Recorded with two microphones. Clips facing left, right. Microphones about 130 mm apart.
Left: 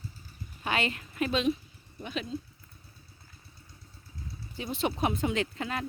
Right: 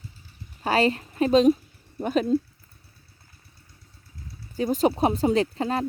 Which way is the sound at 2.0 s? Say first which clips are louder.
Right 13 dB; 50° right (ahead or behind).